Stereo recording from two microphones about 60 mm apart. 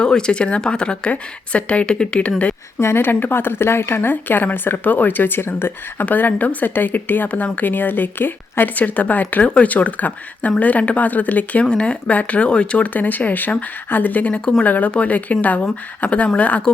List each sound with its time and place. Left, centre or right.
0.0 s a woman's voice: centre
2.8 s a woman's voice: left